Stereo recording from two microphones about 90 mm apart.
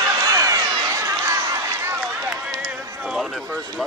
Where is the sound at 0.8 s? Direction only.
30° right (ahead or behind).